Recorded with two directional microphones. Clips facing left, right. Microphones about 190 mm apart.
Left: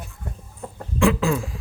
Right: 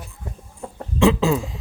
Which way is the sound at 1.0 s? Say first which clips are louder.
Right 3 dB; 25° right (ahead or behind).